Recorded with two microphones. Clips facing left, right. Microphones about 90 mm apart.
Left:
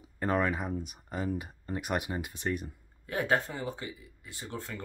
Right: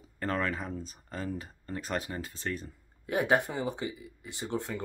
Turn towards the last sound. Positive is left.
turn(degrees=-20)  # may be behind; listen again after turning